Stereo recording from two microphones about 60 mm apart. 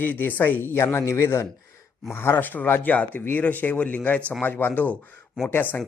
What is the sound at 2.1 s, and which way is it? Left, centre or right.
Speech, left.